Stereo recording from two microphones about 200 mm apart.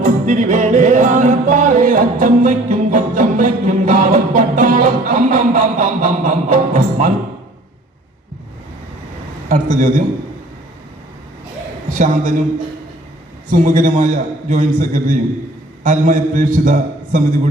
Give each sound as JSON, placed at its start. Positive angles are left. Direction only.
{"t": 0.0, "sound": "music", "side_deg": -40}
{"t": 9.5, "sound": "a man's voice", "side_deg": -40}
{"t": 11.9, "sound": "a man's voice", "side_deg": -40}
{"t": 13.5, "sound": "a man's voice", "side_deg": -40}